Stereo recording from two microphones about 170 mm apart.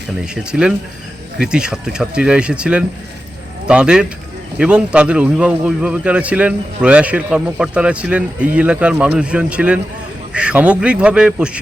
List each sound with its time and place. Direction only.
0.5 s a man's voice: centre (ahead or behind)